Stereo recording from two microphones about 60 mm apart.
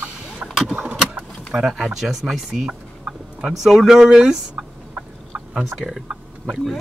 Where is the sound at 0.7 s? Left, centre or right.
Right.